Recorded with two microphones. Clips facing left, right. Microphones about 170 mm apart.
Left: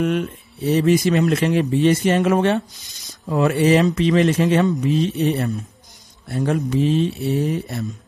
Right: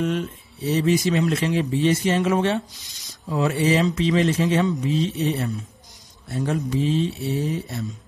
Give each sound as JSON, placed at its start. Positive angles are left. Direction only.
{"t": 0.0, "sound": "speech", "side_deg": 60}